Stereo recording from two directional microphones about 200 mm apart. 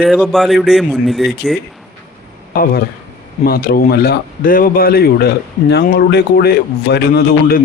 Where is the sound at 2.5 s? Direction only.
45° left (ahead or behind).